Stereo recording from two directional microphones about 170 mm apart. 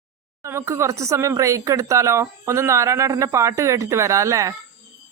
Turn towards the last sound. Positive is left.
turn(degrees=-20)  # may be behind; listen again after turning